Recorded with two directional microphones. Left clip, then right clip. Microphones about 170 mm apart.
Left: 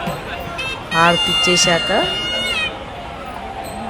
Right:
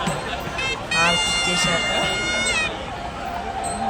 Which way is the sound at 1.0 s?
40° left (ahead or behind).